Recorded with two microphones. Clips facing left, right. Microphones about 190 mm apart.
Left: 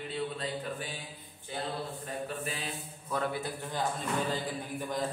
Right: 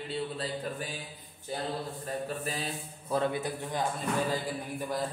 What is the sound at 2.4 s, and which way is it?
Mantra, 40° right (ahead or behind).